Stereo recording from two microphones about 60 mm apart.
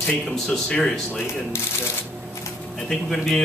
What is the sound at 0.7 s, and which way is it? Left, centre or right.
Speech, centre.